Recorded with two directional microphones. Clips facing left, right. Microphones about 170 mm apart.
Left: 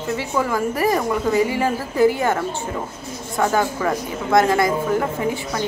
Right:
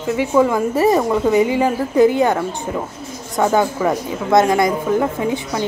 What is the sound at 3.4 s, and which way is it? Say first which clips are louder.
A woman's voice: right 4 dB; 15° right (ahead or behind).